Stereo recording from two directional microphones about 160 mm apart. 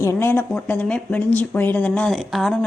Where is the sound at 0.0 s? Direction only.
15° left (ahead or behind).